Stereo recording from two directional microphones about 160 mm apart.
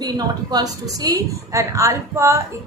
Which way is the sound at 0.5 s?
25° right (ahead or behind).